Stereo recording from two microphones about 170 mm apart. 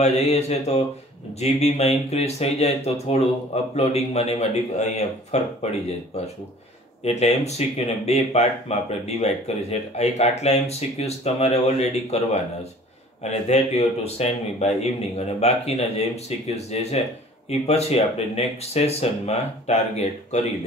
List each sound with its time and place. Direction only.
0.0 s speech: 40° left (ahead or behind)
7.1 s speech: 40° left (ahead or behind)